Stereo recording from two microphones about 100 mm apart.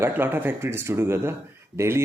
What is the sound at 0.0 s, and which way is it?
Speech, 20° right (ahead or behind).